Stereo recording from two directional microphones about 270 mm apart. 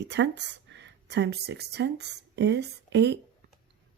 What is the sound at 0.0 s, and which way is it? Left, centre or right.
Speech, right.